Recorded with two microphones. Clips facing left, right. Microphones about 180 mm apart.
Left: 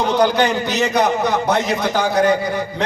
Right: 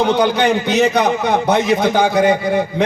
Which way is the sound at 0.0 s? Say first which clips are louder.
Right 1 dB; 55° right (ahead or behind).